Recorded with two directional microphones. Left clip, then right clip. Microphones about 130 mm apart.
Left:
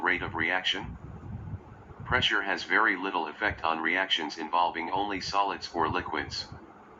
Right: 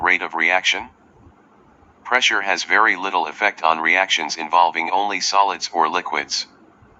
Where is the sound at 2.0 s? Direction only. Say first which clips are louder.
Right 9 dB; 35° right (ahead or behind).